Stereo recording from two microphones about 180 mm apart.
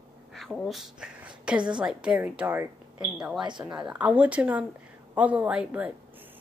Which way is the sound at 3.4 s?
25° right (ahead or behind).